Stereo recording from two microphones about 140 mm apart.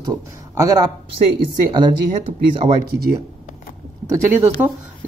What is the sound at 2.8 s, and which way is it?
Speech, 90° right.